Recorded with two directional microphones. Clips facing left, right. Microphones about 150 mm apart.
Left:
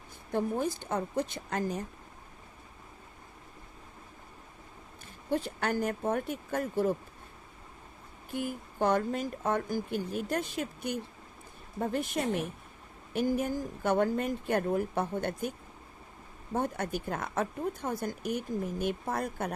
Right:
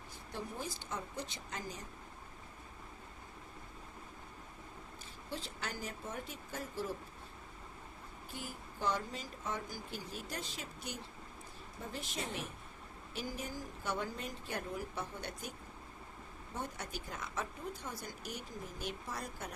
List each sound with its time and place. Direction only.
0.3 s speech: 55° left (ahead or behind)
5.3 s speech: 55° left (ahead or behind)
8.3 s speech: 55° left (ahead or behind)